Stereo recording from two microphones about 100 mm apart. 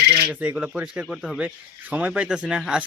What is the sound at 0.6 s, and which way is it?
Speech, 15° right (ahead or behind).